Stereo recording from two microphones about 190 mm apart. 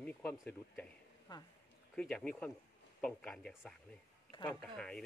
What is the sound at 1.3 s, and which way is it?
Speech, 20° left (ahead or behind).